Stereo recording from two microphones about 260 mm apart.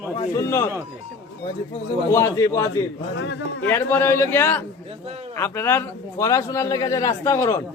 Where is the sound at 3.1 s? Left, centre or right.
Left.